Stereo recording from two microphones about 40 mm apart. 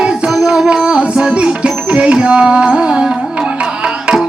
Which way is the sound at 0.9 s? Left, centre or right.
Right.